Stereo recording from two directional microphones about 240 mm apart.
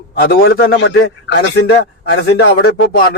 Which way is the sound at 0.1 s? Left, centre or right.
Left.